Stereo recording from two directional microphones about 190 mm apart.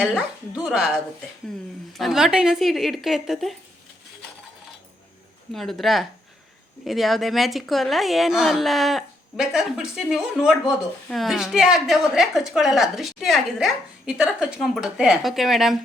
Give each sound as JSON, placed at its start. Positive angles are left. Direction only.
{"t": 0.0, "sound": "a woman's voice", "side_deg": 0}
{"t": 1.9, "sound": "a woman's voice", "side_deg": 0}
{"t": 5.5, "sound": "a woman's voice", "side_deg": 0}